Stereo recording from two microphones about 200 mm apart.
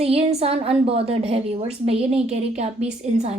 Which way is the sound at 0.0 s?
30° right (ahead or behind).